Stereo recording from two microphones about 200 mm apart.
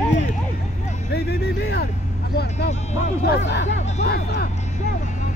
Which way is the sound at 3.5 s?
60° left (ahead or behind).